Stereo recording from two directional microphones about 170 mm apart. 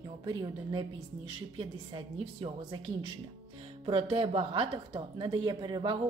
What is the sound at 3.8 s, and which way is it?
Speech, 30° right (ahead or behind).